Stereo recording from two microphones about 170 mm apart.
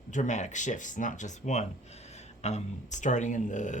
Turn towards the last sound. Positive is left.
turn(degrees=45)  # may be behind; listen again after turning